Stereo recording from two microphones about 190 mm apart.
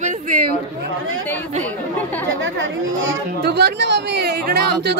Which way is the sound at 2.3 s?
90° right.